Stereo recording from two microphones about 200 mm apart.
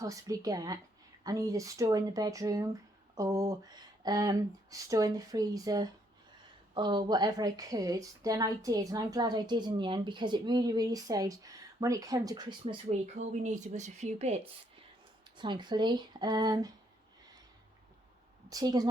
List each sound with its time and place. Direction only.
0.0 s a woman's voice: 15° right (ahead or behind)
12.6 s speech: 35° right (ahead or behind)
15.4 s a woman's voice: 20° right (ahead or behind)
18.4 s a woman's voice: 20° right (ahead or behind)